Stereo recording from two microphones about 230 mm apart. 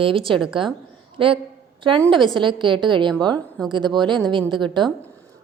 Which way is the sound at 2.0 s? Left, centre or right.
Right.